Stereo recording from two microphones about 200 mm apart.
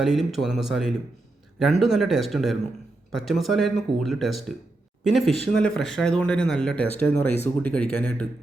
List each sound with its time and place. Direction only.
0.0 s speech: centre (ahead or behind)